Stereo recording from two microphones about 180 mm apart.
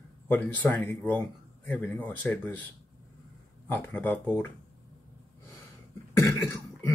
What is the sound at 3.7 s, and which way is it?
Speech, 10° left (ahead or behind).